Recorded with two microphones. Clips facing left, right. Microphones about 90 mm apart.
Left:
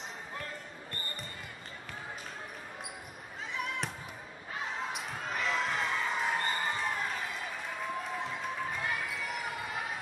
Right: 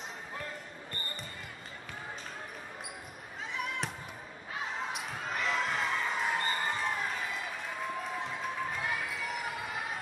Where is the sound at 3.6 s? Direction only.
Centre (ahead or behind).